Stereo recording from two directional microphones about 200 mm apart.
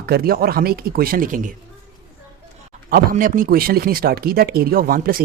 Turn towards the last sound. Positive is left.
turn(degrees=-45)  # may be behind; listen again after turning